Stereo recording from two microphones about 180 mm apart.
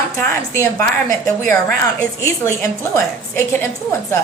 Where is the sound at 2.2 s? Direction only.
15° left (ahead or behind).